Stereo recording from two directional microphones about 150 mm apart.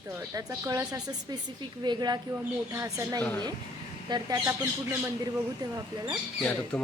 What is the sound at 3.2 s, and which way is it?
Speech, 10° left (ahead or behind).